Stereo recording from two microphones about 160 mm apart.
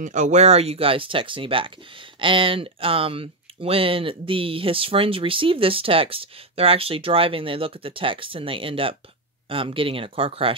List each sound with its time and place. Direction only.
0.0 s speech: 50° right (ahead or behind)